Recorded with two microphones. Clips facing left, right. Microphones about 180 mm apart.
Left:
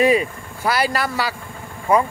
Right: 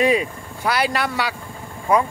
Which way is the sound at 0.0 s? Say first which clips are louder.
Left 2 dB; 5° left (ahead or behind).